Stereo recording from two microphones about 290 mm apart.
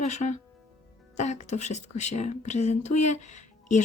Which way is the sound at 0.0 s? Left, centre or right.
Left.